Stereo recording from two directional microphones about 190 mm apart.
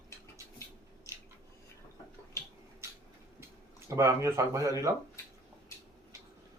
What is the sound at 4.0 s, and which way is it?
Speech, 15° right (ahead or behind).